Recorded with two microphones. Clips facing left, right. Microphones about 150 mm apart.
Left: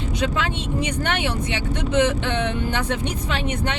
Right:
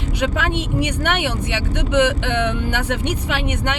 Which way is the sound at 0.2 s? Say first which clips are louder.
Right 4 dB; 65° right (ahead or behind).